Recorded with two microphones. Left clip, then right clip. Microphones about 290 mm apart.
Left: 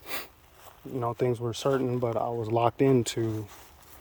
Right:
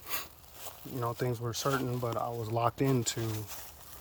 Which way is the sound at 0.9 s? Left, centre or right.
Left.